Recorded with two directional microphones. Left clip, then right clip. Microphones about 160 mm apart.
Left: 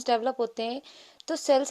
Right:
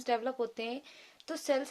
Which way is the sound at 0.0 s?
35° left (ahead or behind).